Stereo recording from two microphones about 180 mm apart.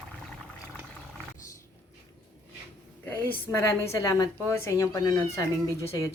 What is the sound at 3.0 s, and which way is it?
A woman's voice, 10° left (ahead or behind).